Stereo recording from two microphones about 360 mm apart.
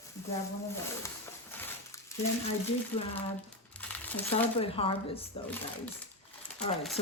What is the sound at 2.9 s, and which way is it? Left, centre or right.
Speech, centre.